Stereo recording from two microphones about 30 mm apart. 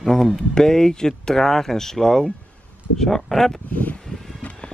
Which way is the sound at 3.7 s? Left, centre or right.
Left.